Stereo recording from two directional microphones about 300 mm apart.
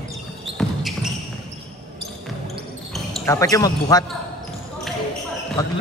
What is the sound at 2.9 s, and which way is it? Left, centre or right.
Speech, centre.